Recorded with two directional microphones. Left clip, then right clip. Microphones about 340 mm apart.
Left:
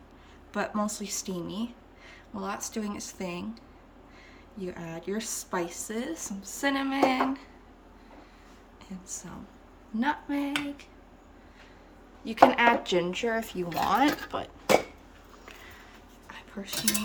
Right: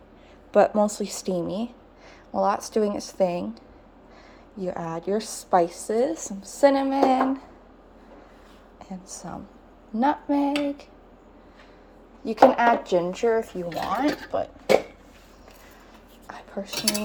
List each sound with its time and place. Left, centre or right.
0.5 s a woman's voice: centre
1.5 s a sound: centre
2.4 s a woman's voice: centre
9.9 s a woman's voice: centre
12.2 s a woman's voice: centre
13.3 s speech: centre